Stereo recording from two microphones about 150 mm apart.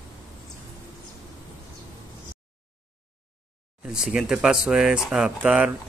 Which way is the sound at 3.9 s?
5° right (ahead or behind).